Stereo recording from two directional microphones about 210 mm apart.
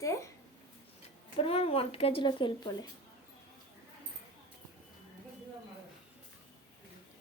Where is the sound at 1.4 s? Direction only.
25° left (ahead or behind).